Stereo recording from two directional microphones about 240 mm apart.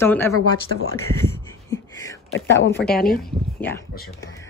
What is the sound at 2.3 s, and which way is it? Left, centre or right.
Speech, left.